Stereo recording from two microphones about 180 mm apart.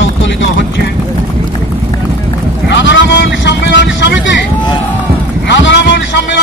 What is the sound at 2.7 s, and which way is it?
Speech, 85° left.